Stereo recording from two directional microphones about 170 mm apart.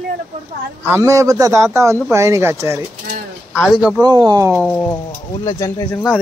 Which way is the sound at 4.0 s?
25° right (ahead or behind).